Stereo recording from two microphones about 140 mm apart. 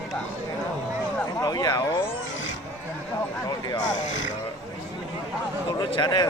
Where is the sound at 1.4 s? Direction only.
30° left (ahead or behind).